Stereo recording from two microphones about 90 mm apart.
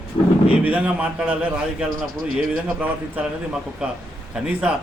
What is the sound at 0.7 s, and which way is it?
A man's voice, 15° right (ahead or behind).